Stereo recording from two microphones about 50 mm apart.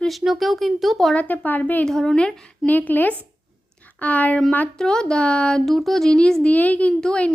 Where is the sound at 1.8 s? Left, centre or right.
Centre.